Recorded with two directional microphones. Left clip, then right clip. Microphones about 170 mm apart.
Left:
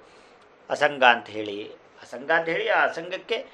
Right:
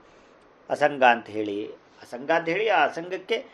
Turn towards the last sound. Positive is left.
turn(degrees=-40)  # may be behind; listen again after turning